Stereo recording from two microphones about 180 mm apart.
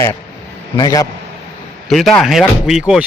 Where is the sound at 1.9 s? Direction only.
Centre (ahead or behind).